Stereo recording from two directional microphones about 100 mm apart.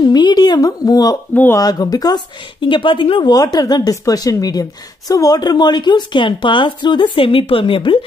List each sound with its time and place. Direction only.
0.1 s a woman's voice: 45° left (ahead or behind)
1.3 s speech: 20° left (ahead or behind)
1.6 s a woman's voice: 40° left (ahead or behind)
3.5 s a woman's voice: 40° left (ahead or behind); by 8.0 s 60° left (ahead or behind)